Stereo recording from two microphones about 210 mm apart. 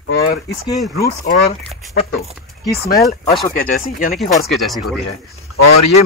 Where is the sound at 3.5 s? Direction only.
40° left (ahead or behind).